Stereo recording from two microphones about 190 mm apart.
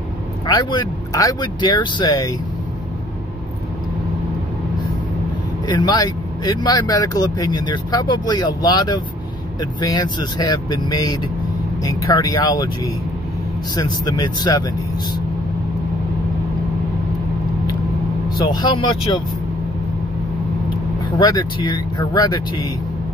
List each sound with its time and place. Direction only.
0.5 s speech: 25° left (ahead or behind)
5.7 s speech: 20° left (ahead or behind)
14.0 s speech: 20° left (ahead or behind)
18.4 s speech: 20° left (ahead or behind)
21.2 s speech: 20° left (ahead or behind)